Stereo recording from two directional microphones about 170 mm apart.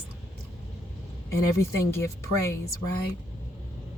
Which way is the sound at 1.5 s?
15° left (ahead or behind).